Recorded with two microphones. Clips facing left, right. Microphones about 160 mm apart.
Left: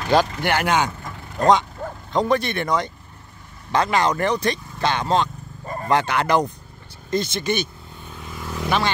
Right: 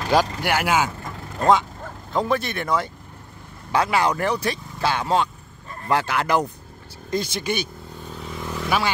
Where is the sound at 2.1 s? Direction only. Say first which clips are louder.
Left 2 dB; 5° right (ahead or behind).